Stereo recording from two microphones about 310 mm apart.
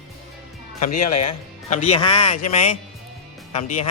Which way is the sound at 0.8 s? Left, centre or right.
Left.